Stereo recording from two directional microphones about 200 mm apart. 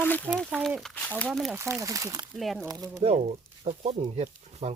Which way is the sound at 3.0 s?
35° right (ahead or behind).